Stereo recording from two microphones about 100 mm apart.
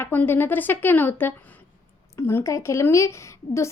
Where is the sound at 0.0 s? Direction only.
20° left (ahead or behind).